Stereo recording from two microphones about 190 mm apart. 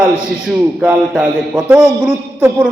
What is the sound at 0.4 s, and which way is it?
A man's voice, 5° right (ahead or behind).